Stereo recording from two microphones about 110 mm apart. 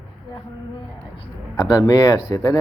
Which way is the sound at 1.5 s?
35° left (ahead or behind).